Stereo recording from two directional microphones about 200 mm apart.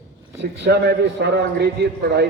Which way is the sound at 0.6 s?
60° right (ahead or behind).